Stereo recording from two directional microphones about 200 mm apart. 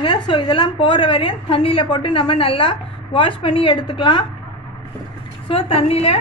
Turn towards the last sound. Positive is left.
turn(degrees=30)  # may be behind; listen again after turning